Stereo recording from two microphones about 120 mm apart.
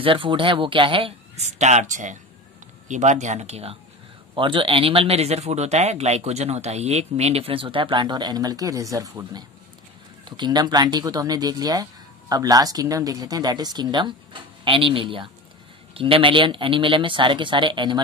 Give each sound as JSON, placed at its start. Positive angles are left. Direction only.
{"t": 0.0, "sound": "speech", "side_deg": -45}
{"t": 1.3, "sound": "speech", "side_deg": -70}
{"t": 4.4, "sound": "speech", "side_deg": -45}